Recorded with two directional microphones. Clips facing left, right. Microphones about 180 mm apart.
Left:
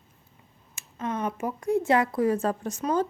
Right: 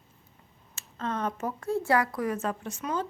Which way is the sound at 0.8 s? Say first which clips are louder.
Left 2 dB; 15° left (ahead or behind).